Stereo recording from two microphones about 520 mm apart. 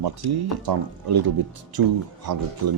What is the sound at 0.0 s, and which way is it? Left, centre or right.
Speech, right.